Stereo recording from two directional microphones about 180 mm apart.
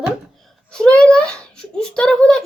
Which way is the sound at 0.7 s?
5° left (ahead or behind).